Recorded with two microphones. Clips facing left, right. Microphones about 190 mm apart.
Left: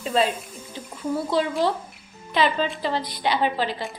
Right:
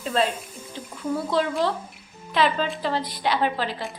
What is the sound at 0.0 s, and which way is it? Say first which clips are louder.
Speech: left 1 dB; centre (ahead or behind).